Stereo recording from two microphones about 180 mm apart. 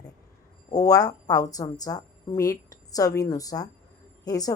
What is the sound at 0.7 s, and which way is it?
A woman's voice, 20° left (ahead or behind).